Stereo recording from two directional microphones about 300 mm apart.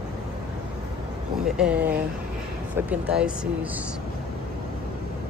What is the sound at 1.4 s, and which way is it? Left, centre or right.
Speech, centre.